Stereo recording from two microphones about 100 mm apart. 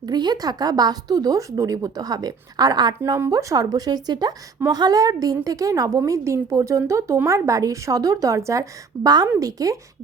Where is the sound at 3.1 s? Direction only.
30° right (ahead or behind).